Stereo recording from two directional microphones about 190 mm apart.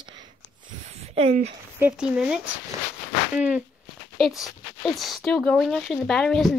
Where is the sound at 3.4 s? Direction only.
10° right (ahead or behind).